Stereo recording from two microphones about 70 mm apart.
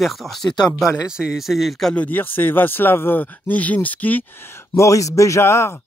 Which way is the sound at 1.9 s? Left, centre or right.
Left.